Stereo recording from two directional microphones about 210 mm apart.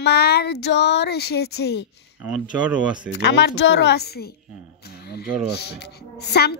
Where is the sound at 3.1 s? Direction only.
55° left (ahead or behind).